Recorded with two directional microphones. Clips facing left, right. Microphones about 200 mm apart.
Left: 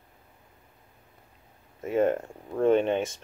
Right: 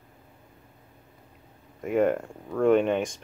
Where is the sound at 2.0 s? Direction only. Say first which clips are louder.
Left 1 dB; 25° left (ahead or behind).